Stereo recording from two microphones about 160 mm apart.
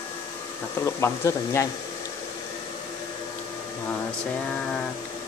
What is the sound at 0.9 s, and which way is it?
Speech, 15° left (ahead or behind).